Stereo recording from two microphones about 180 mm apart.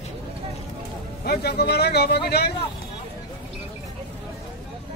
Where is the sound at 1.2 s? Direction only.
65° left (ahead or behind).